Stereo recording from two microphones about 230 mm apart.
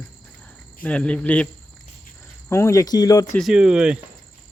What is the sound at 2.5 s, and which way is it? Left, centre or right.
Speech, centre.